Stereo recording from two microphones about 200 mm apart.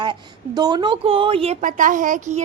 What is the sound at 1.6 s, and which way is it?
Speech, 40° right (ahead or behind).